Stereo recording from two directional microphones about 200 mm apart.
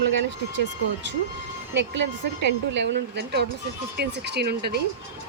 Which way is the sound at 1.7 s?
60° right (ahead or behind).